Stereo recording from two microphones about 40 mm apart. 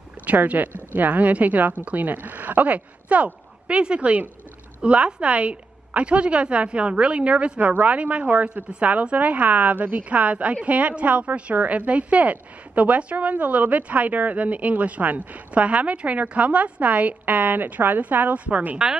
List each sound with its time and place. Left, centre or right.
0.2 s a woman's voice: right
3.6 s a woman's voice: right
10.0 s a woman's voice: right